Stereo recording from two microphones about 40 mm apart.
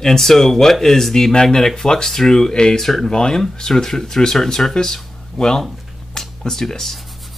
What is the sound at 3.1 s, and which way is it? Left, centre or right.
Speech, left.